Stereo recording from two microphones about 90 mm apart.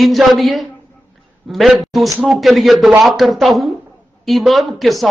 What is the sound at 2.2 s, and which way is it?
Speech, centre (ahead or behind).